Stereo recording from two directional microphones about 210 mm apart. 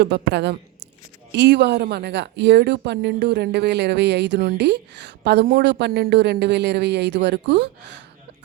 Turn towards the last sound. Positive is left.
turn(degrees=-55)  # may be behind; listen again after turning